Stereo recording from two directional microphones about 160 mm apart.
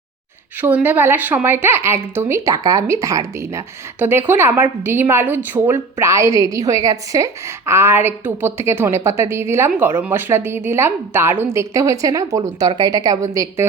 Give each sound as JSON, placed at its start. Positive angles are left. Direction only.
{"t": 0.6, "sound": "a woman's voice", "side_deg": -10}